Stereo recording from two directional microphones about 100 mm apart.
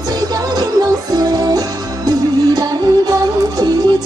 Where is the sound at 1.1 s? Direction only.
40° right (ahead or behind).